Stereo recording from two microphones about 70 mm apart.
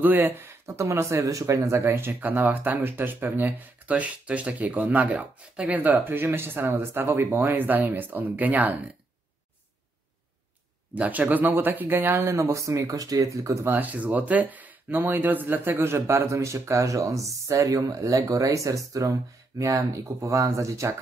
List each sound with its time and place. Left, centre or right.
0.0 s speech: right
0.7 s speech: right
11.0 s speech: right
13.7 s speech: right